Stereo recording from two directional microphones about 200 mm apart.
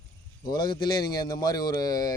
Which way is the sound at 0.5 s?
20° left (ahead or behind).